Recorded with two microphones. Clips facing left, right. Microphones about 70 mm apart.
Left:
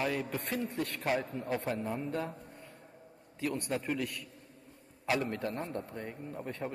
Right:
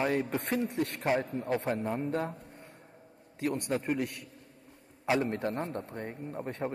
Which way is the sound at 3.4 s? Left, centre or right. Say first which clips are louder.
Right 3 dB; right.